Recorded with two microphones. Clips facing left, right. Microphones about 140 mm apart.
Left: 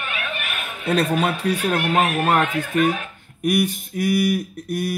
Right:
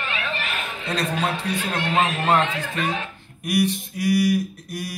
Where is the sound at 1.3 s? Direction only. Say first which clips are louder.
Left 5 dB; 25° right (ahead or behind).